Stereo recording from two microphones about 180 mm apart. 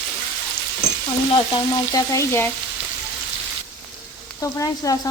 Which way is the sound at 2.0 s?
15° left (ahead or behind).